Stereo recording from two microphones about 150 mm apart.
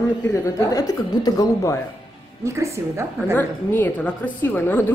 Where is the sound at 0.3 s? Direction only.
20° left (ahead or behind).